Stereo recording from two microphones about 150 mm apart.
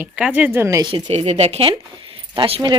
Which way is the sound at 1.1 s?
45° right (ahead or behind).